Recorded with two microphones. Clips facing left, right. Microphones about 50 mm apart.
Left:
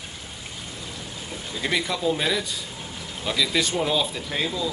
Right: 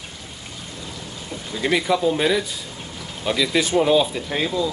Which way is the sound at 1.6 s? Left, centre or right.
Centre.